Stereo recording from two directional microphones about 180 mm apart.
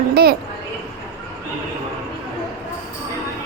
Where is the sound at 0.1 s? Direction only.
60° right (ahead or behind).